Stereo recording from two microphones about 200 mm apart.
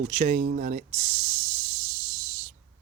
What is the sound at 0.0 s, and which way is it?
Speech, 40° right (ahead or behind).